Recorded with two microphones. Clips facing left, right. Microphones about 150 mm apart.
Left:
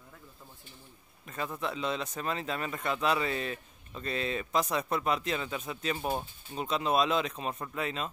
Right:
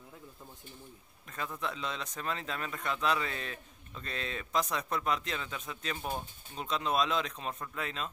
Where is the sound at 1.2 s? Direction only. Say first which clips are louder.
Left 3 dB; 5° left (ahead or behind).